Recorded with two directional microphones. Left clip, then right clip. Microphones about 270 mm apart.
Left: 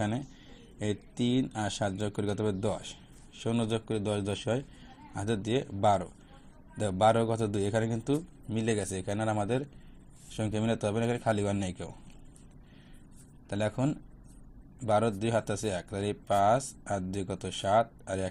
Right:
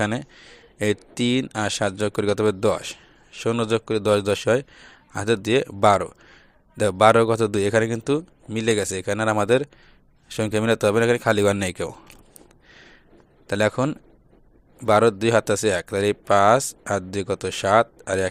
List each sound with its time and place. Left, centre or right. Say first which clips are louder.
0.0 s speech: right 9 dB; right
13.5 s speech: right 11 dB; right